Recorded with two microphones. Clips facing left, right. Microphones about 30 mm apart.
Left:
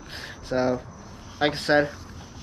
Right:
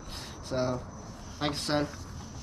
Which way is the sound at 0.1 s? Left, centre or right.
Left.